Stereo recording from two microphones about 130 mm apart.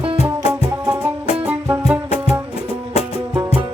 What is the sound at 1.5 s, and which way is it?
Music, 15° right (ahead or behind).